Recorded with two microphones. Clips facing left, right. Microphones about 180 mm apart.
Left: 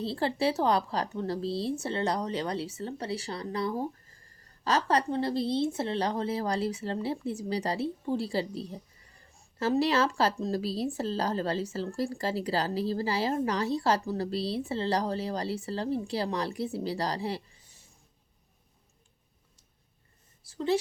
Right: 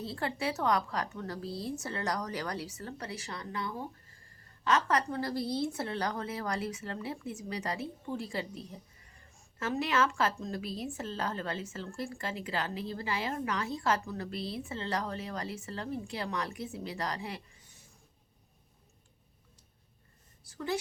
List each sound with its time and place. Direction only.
0.0 s a woman's voice: 30° left (ahead or behind)
20.4 s speech: 25° left (ahead or behind)